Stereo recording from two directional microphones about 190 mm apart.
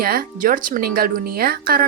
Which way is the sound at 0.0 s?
50° right (ahead or behind).